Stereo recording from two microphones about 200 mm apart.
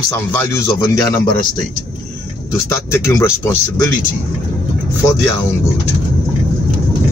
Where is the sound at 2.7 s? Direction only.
15° left (ahead or behind).